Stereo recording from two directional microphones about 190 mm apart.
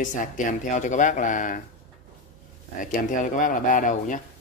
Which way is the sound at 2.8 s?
45° left (ahead or behind).